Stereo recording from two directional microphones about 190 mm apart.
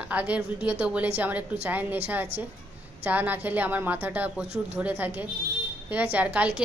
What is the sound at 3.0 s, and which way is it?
A woman's voice, 10° right (ahead or behind).